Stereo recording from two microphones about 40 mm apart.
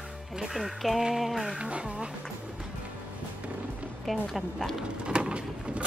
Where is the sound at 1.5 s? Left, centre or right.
Right.